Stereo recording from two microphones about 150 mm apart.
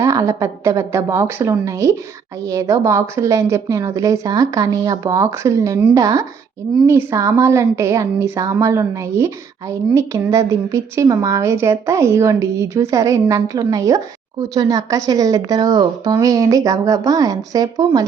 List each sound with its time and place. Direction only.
0.0 s a woman's voice: 20° right (ahead or behind)